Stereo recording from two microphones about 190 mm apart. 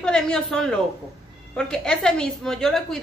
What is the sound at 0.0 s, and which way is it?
A woman's voice, 5° left (ahead or behind).